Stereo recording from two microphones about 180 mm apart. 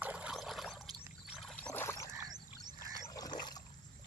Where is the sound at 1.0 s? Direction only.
Centre (ahead or behind); by 2.0 s 15° left (ahead or behind).